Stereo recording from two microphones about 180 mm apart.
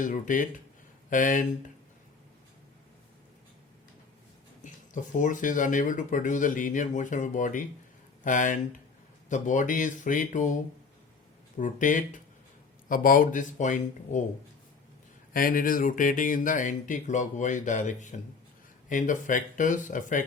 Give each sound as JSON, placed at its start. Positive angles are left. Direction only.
{"t": 0.0, "sound": "speech", "side_deg": 45}
{"t": 5.1, "sound": "speech", "side_deg": 45}
{"t": 15.3, "sound": "speech", "side_deg": 50}